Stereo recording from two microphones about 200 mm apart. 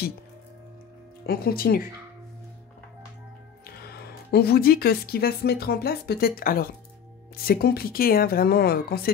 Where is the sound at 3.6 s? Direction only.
50° left (ahead or behind).